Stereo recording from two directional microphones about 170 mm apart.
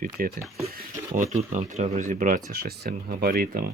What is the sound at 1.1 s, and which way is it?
Speech, 45° right (ahead or behind).